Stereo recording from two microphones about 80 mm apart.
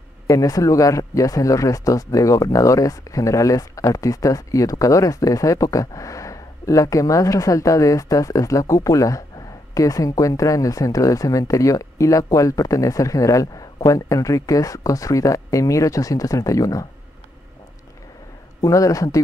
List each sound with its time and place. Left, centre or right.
0.3 s speech: left
18.6 s speech: left